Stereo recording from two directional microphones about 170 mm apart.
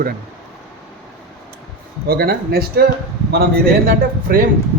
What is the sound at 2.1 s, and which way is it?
Speech, 65° right (ahead or behind).